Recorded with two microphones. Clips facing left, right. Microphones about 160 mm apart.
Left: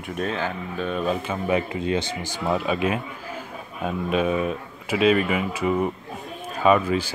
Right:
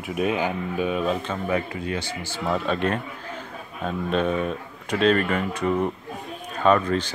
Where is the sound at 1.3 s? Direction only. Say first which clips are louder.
Left 2 dB; 20° left (ahead or behind).